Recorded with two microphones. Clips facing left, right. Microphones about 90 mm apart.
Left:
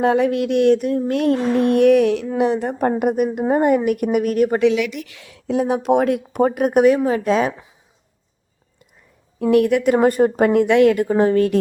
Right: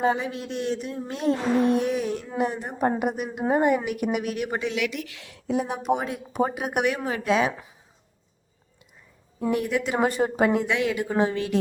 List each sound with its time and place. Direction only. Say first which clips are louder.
0.0 s a woman's voice: left 8 dB; 70° left (ahead or behind); by 4.4 s 45° left (ahead or behind)
5.5 s a woman's voice: left 7 dB; 90° left; by 6.7 s 50° left (ahead or behind)
6.7 s a woman's voice: left 11 dB; 35° left (ahead or behind)
9.4 s a woman's voice: left 10 dB; 65° left (ahead or behind); by 11.6 s 50° left (ahead or behind)